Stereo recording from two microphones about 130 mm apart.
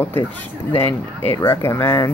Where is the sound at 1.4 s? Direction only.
20° left (ahead or behind).